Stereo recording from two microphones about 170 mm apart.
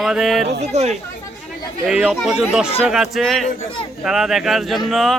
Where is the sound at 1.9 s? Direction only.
5° right (ahead or behind).